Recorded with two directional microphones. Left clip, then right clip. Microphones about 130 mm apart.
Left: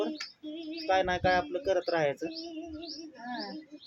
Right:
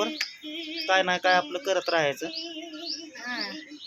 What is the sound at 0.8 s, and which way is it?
Speech, 25° right (ahead or behind).